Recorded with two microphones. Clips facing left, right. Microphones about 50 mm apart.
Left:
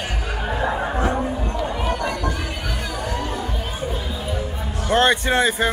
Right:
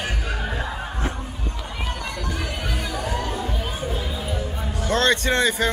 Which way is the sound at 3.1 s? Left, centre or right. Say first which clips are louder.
Left 1 dB; centre.